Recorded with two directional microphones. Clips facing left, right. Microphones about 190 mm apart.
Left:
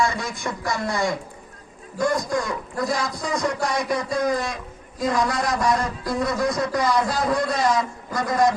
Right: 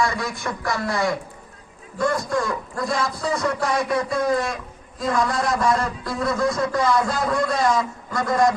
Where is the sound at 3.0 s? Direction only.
15° left (ahead or behind).